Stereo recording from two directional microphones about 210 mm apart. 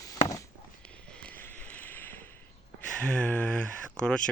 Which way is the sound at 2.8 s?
5° left (ahead or behind).